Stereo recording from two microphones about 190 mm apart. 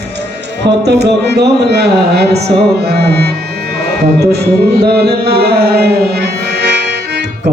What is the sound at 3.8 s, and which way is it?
Music, 60° right (ahead or behind).